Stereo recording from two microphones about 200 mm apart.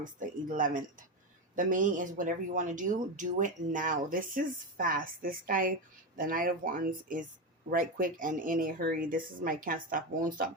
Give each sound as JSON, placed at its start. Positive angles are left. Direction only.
{"t": 0.0, "sound": "speech", "side_deg": -40}